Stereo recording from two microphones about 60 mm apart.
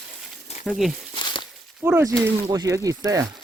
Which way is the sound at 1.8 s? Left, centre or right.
Right.